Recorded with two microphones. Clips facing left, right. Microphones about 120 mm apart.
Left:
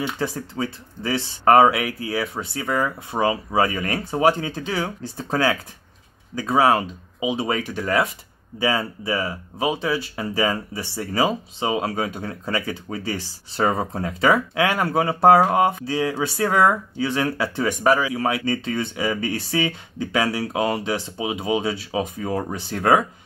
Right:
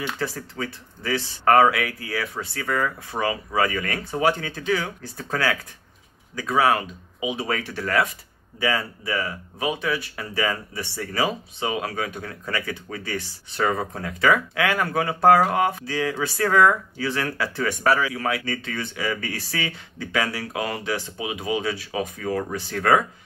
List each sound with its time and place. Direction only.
0.0 s speech: 20° left (ahead or behind)